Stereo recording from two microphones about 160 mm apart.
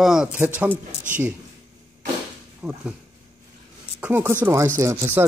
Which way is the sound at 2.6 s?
5° right (ahead or behind).